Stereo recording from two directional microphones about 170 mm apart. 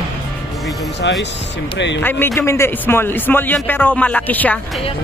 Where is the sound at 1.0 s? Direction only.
90° left.